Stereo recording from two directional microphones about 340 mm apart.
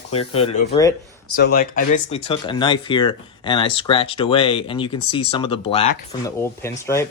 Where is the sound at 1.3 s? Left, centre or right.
Left; by 7.0 s centre.